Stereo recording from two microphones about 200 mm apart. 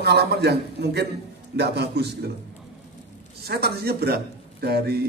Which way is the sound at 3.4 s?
50° right (ahead or behind).